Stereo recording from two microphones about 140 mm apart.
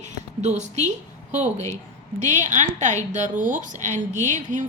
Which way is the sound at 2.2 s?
60° right (ahead or behind).